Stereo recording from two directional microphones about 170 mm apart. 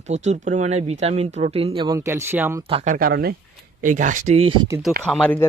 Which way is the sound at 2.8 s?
60° right (ahead or behind).